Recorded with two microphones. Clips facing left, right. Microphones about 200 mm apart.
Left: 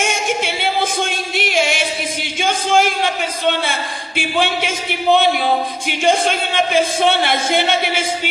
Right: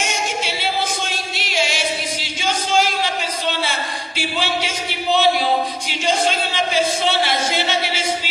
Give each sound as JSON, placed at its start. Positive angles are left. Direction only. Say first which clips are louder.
{"t": 0.0, "sound": "a capella", "louder": "left 4 dB", "side_deg": 55}
{"t": 5.9, "sound": "speech", "louder": "left 4 dB", "side_deg": 55}